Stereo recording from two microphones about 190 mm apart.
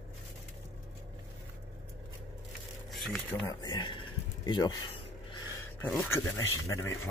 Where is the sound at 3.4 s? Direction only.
20° left (ahead or behind).